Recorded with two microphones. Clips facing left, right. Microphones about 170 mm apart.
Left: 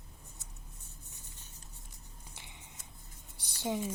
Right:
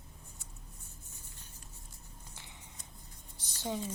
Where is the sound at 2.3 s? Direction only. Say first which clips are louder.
Left 1 dB; 15° left (ahead or behind).